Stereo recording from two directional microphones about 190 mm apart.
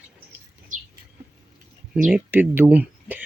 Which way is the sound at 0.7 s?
45° right (ahead or behind).